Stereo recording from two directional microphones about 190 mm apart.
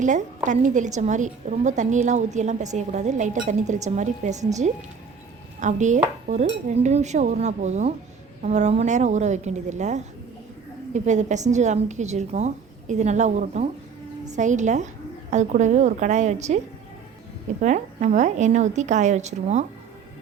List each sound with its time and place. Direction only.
0.0 s a woman's voice: 40° right (ahead or behind)
5.5 s dishes: 40° right (ahead or behind)
6.7 s a woman's voice: 35° right (ahead or behind)
17.6 s a woman's voice: 40° right (ahead or behind)